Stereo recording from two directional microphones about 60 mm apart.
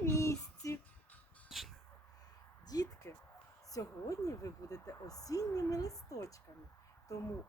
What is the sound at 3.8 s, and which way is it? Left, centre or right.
Speech, left.